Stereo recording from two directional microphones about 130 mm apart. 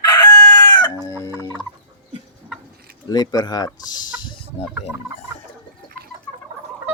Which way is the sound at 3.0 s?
30° left (ahead or behind).